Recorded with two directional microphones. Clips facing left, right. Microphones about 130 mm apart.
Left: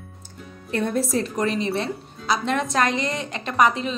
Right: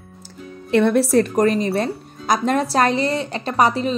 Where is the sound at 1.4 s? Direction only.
45° right (ahead or behind).